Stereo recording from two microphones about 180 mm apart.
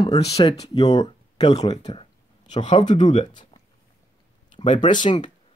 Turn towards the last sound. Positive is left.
turn(degrees=25)  # may be behind; listen again after turning